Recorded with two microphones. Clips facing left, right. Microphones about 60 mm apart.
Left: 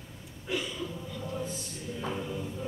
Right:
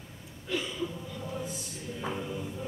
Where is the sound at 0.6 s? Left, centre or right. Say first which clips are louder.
Right 2 dB; centre.